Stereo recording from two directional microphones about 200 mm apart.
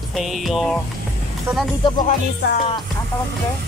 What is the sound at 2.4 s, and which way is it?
Music, 55° left (ahead or behind).